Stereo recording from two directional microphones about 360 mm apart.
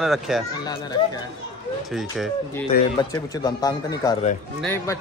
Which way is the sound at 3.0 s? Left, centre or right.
Centre.